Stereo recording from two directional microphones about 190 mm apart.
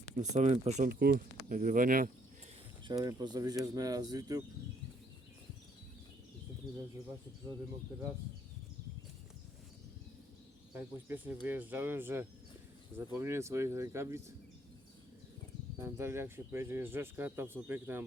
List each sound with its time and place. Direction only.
0.2 s speech: 35° right (ahead or behind)
2.8 s speech: 20° right (ahead or behind)
10.8 s speech: 10° right (ahead or behind)
15.8 s speech: 15° right (ahead or behind)